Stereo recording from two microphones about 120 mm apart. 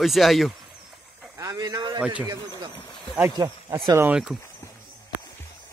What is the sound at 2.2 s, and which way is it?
Speech, 35° right (ahead or behind).